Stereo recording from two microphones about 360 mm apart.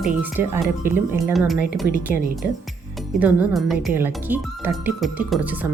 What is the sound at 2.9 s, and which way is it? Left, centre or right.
Speech, centre.